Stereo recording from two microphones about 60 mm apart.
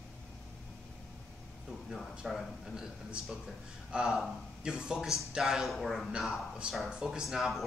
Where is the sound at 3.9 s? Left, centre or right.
Centre.